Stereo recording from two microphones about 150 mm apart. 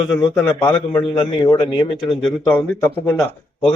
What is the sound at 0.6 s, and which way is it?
Speech, 30° left (ahead or behind).